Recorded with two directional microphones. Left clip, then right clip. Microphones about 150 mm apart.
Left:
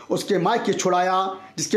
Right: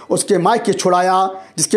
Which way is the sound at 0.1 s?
35° right (ahead or behind).